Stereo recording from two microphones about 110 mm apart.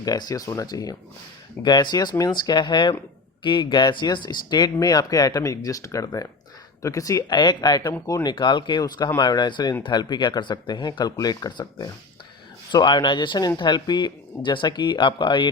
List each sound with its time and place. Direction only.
0.0 s speech: 35° left (ahead or behind)